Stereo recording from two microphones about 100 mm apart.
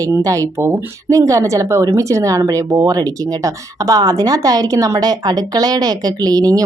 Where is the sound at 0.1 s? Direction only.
35° right (ahead or behind).